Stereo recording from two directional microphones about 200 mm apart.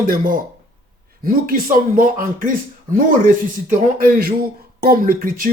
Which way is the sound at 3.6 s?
45° right (ahead or behind).